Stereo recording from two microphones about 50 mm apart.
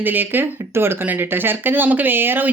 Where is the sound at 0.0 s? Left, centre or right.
Right.